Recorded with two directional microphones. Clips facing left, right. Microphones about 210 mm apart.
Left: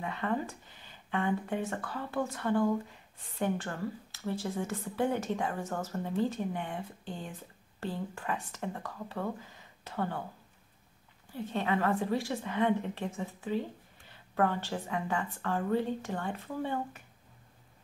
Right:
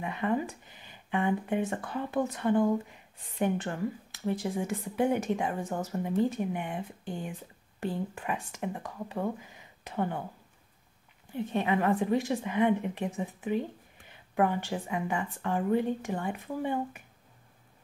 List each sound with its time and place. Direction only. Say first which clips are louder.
0.0 s speech: right 3 dB; 15° right (ahead or behind)
11.3 s speech: right 3 dB; 15° right (ahead or behind)